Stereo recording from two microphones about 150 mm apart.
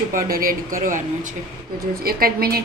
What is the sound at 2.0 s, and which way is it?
Speech, 85° right.